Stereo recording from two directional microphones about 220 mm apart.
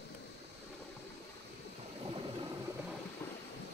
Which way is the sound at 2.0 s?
25° right (ahead or behind).